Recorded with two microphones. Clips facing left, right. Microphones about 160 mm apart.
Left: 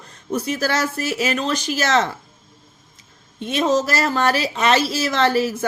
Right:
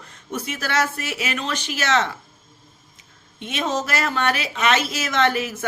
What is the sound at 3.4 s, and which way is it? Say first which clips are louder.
Speech: left 6 dB; 35° left (ahead or behind).